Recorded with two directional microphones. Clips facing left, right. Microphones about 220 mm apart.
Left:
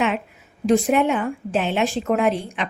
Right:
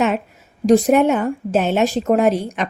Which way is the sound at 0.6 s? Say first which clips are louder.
Right 5 dB; 40° right (ahead or behind).